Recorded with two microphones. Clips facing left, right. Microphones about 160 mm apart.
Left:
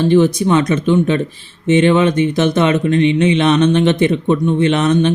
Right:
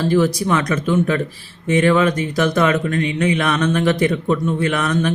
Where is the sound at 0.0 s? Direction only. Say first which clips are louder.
Left 5 dB; 20° left (ahead or behind).